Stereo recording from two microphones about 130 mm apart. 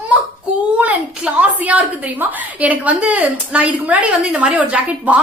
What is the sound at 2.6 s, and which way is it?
A woman's voice, 10° right (ahead or behind).